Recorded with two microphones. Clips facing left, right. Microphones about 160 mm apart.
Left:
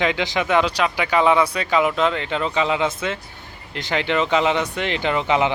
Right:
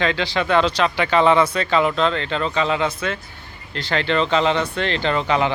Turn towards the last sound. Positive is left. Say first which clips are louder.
# even
turn(degrees=15)  # may be behind; listen again after turning